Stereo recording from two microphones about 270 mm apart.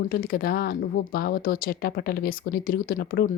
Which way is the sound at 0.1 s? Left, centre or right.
Left.